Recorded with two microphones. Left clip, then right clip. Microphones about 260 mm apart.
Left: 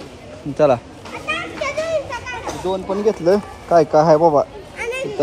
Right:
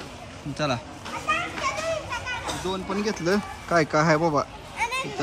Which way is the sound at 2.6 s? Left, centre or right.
Centre.